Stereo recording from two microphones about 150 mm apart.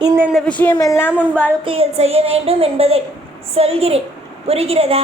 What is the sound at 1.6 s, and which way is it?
A woman's voice, 40° right (ahead or behind).